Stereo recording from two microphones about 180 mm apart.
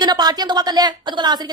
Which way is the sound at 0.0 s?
20° right (ahead or behind).